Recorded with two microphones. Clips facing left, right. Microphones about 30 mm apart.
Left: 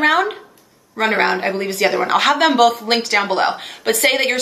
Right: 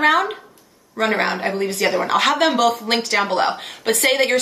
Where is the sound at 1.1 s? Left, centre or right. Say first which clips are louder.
Left 5 dB; centre.